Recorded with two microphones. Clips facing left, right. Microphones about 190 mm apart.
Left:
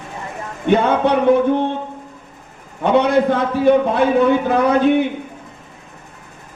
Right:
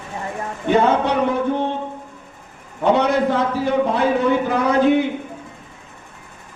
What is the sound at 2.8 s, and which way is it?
A man's voice, 55° left (ahead or behind).